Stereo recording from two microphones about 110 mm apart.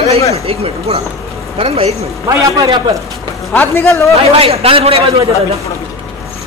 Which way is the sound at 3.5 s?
20° left (ahead or behind).